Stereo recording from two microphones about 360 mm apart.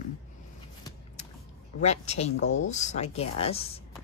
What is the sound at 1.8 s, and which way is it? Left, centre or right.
Speech, centre.